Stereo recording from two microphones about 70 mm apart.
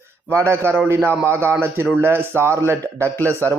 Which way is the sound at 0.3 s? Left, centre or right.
Right.